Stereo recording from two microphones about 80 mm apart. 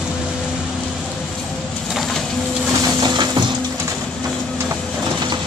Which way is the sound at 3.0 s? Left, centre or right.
Right.